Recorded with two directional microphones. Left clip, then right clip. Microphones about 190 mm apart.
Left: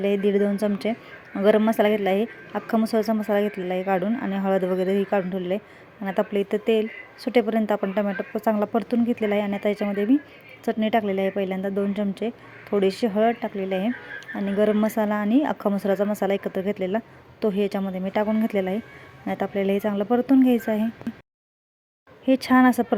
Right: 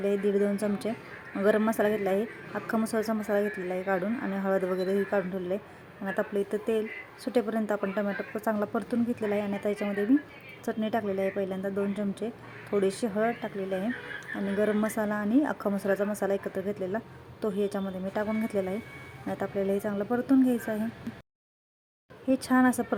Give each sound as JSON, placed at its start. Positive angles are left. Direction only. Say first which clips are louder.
{"t": 0.0, "sound": "speech", "louder": "left 5 dB", "side_deg": 25}
{"t": 21.1, "sound": "a sound", "louder": "left 6 dB", "side_deg": 0}
{"t": 22.3, "sound": "speech", "louder": "left 7 dB", "side_deg": 25}